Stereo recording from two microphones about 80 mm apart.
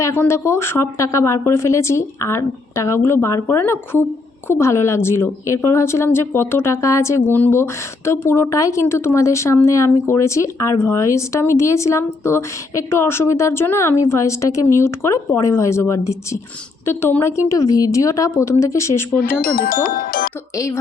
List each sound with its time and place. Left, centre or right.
0.0 s a woman's voice: left
17.5 s a woman's voice: left